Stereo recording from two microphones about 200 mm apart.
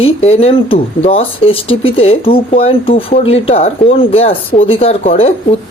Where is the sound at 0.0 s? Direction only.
30° left (ahead or behind).